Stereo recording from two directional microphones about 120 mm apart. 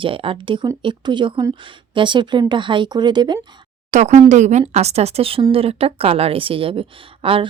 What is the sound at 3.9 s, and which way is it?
Speech, 85° right.